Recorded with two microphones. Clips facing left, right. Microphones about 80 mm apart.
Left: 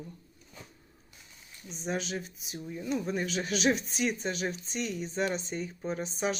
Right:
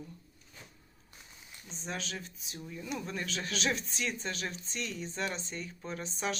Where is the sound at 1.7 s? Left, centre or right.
Centre.